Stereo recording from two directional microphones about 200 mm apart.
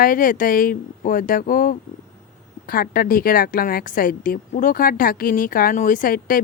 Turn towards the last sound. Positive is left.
turn(degrees=45)  # may be behind; listen again after turning